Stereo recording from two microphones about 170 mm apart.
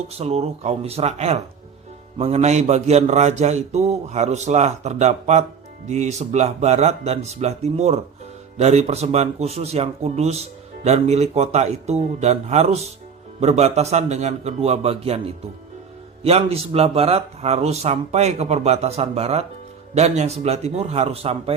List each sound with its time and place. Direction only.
0.1 s speech: 40° right (ahead or behind)